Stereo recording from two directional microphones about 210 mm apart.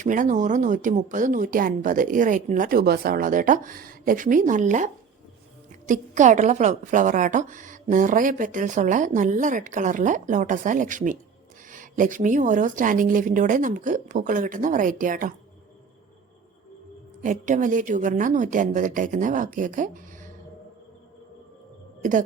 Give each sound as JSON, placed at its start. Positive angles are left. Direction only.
{"t": 0.0, "sound": "a woman's voice", "side_deg": -40}
{"t": 17.2, "sound": "a woman's voice", "side_deg": -40}